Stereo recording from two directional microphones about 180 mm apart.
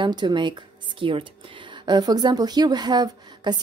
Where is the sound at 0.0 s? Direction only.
25° right (ahead or behind).